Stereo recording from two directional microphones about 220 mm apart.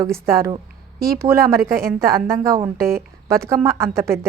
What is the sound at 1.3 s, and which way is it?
Speech, 40° right (ahead or behind).